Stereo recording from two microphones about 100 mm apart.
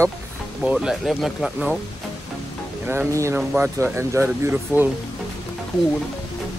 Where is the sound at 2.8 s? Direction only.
20° right (ahead or behind).